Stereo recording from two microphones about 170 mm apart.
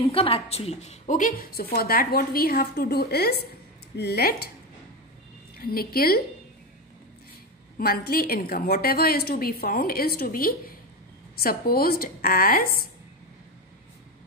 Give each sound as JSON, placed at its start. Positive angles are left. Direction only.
{"t": 0.0, "sound": "a woman's voice", "side_deg": 35}
{"t": 5.6, "sound": "a woman's voice", "side_deg": 60}
{"t": 7.7, "sound": "a woman's voice", "side_deg": 60}